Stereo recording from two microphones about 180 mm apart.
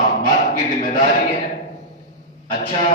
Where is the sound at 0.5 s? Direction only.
45° left (ahead or behind).